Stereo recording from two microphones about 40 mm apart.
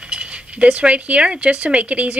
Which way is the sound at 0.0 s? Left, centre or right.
Right.